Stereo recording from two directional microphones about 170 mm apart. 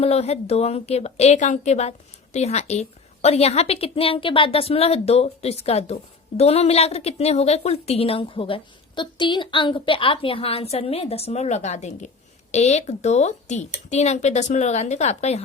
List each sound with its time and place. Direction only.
0.0 s speech: 40° left (ahead or behind)